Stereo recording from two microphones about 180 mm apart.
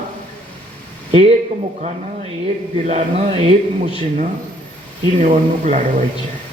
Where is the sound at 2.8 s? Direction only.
35° right (ahead or behind).